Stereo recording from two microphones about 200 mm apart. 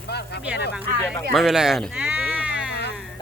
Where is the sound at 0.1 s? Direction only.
55° left (ahead or behind).